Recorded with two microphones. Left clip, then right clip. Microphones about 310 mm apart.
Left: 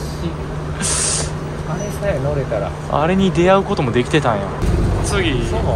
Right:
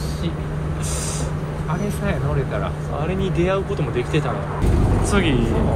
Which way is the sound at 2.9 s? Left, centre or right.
Left.